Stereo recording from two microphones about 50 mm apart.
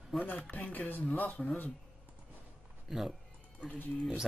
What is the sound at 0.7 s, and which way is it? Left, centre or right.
Speech, left.